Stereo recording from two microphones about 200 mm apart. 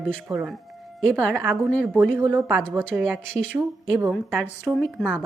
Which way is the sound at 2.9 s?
10° right (ahead or behind).